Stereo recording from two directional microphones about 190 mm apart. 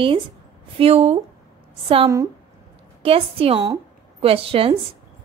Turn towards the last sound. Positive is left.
turn(degrees=-30)  # may be behind; listen again after turning